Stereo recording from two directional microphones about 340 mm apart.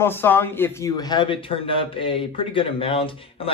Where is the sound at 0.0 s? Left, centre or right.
Centre.